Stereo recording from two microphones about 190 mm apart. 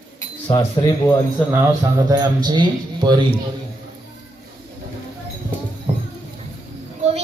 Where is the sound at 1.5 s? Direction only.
15° right (ahead or behind).